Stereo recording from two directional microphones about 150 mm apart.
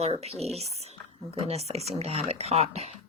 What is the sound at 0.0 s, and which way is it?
Speech, 45° right (ahead or behind).